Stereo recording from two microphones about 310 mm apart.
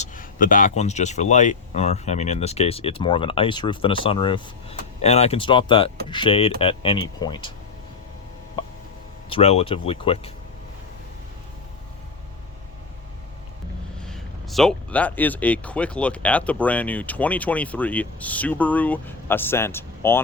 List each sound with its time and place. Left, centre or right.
0.0 s a sound: left
0.8 s speech: left
9.3 s speech: centre
14.1 s speech: centre